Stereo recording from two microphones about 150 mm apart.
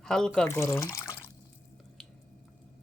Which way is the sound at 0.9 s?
15° left (ahead or behind).